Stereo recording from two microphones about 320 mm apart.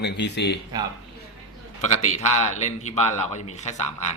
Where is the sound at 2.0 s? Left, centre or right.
Left.